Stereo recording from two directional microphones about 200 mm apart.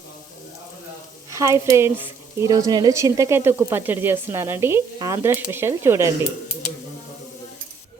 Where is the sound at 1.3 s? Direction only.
15° right (ahead or behind).